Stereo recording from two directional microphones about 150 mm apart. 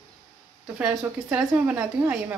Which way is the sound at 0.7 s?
10° right (ahead or behind).